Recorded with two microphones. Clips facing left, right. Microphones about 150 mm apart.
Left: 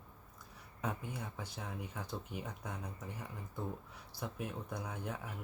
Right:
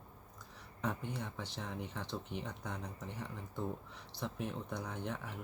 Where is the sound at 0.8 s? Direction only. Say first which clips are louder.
Right 2 dB; 5° left (ahead or behind).